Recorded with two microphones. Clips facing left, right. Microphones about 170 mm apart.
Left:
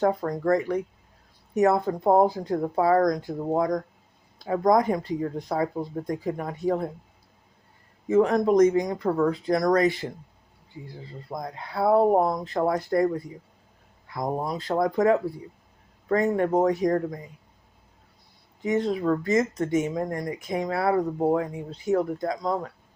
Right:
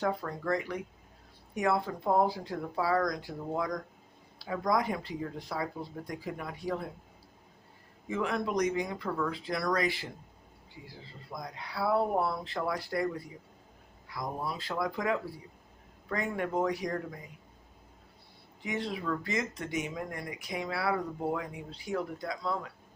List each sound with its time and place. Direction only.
0.0 s speech: 45° left (ahead or behind)
8.0 s speech: 40° left (ahead or behind)
11.3 s speech: 50° left (ahead or behind)
18.6 s speech: 45° left (ahead or behind)